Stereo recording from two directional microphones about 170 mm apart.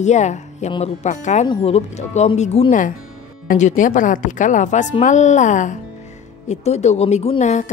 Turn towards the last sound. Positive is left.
turn(degrees=40)  # may be behind; listen again after turning